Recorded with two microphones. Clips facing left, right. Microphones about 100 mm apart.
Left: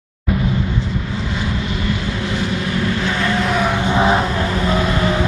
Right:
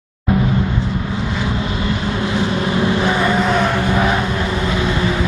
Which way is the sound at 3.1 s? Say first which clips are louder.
Right 3 dB; 15° right (ahead or behind).